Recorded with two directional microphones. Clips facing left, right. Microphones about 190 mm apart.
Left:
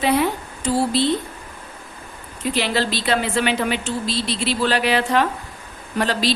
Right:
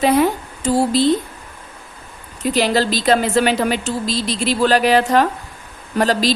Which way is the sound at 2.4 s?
40° right (ahead or behind).